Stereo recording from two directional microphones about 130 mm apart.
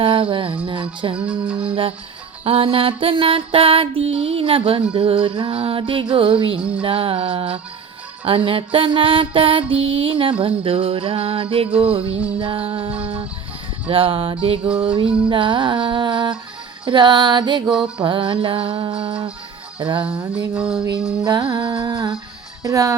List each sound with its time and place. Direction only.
0.0 s music: 45° right (ahead or behind)
6.6 s music: 10° right (ahead or behind)
6.8 s music: 45° right (ahead or behind)
17.7 s music: 5° right (ahead or behind)
17.9 s music: 40° right (ahead or behind)
20.6 s music: 5° right (ahead or behind)
21.2 s music: 30° right (ahead or behind)
22.6 s a child's voice: 25° right (ahead or behind)